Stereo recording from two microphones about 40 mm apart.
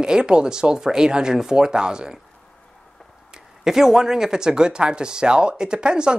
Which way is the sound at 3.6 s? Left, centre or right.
Centre.